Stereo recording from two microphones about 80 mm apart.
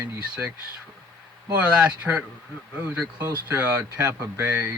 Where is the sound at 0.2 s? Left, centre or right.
Centre.